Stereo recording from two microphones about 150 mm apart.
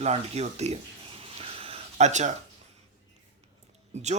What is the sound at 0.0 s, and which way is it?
Speech, 45° right (ahead or behind).